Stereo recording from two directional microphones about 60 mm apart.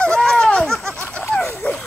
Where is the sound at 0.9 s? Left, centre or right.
Centre.